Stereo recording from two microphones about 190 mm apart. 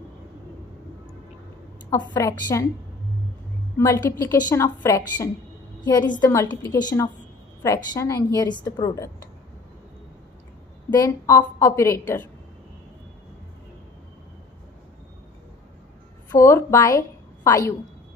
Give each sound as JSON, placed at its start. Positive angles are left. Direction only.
{"t": 2.1, "sound": "a woman's voice", "side_deg": 20}
{"t": 3.7, "sound": "a woman's voice", "side_deg": 15}
{"t": 10.9, "sound": "a woman's voice", "side_deg": 20}
{"t": 16.3, "sound": "a woman's voice", "side_deg": 15}